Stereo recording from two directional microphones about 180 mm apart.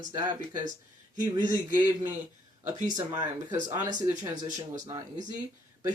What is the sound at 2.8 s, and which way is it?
Speech, 20° right (ahead or behind).